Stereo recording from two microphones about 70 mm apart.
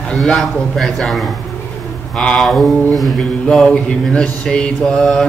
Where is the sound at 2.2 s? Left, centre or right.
Centre.